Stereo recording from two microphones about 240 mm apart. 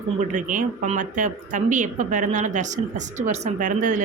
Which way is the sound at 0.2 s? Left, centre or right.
Right.